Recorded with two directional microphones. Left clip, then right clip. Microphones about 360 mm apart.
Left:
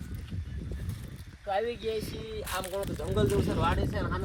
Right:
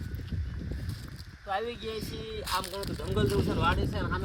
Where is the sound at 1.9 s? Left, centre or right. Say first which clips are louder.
Left 3 dB; centre.